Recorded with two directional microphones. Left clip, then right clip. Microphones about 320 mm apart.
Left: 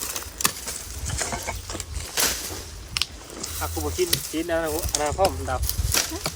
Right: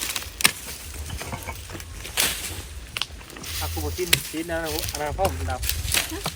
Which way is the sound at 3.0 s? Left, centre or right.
Centre.